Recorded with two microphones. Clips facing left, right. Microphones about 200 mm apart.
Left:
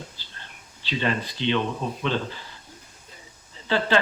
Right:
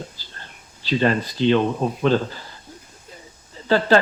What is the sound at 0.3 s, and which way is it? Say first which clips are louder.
Speech: right 3 dB; 40° right (ahead or behind).